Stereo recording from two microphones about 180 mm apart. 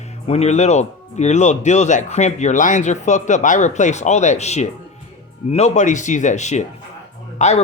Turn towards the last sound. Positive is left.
turn(degrees=40)  # may be behind; listen again after turning